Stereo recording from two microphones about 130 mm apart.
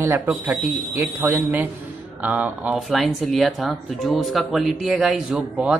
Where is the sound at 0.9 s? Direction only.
15° right (ahead or behind).